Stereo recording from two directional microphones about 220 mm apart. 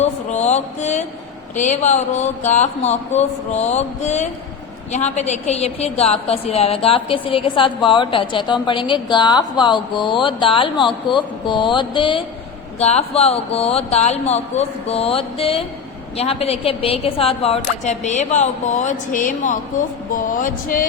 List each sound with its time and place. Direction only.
0.0 s music: 30° left (ahead or behind)
1.5 s a woman's voice: 35° left (ahead or behind)